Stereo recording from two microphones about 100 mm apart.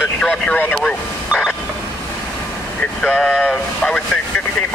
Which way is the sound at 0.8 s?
5° left (ahead or behind).